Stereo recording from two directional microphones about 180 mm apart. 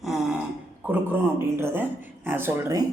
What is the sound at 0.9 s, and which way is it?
Speech, 10° right (ahead or behind).